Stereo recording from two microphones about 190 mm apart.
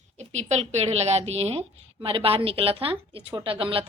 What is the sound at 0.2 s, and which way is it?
A woman's voice, 35° right (ahead or behind).